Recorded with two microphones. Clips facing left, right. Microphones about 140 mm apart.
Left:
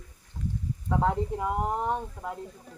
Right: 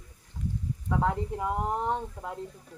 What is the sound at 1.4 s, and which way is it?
Speech, 10° left (ahead or behind).